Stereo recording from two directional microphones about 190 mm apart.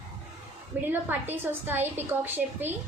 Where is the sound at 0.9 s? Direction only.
10° right (ahead or behind).